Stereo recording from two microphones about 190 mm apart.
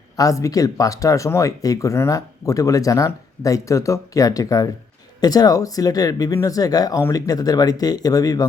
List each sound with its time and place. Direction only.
0.2 s speech: 15° left (ahead or behind)